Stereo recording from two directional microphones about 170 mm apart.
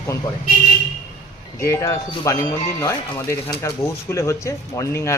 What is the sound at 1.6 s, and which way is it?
Speech, 15° left (ahead or behind).